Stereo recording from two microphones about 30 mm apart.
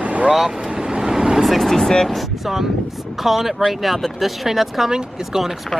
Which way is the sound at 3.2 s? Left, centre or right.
Centre.